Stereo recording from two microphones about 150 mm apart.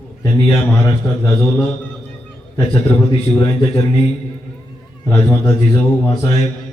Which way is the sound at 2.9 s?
35° left (ahead or behind).